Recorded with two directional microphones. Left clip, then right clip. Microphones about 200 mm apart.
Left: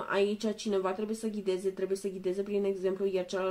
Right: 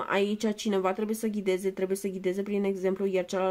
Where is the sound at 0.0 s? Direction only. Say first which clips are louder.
Right 2 dB; 50° right (ahead or behind).